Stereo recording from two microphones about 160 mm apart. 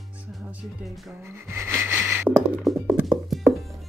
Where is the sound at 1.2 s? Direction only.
15° right (ahead or behind).